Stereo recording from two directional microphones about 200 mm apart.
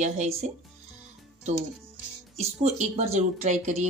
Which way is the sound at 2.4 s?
30° right (ahead or behind).